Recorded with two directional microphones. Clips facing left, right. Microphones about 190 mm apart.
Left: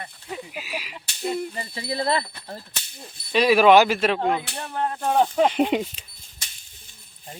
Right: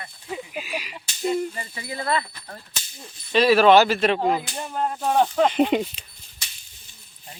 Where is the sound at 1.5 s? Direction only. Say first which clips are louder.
Left 4 dB; 30° left (ahead or behind).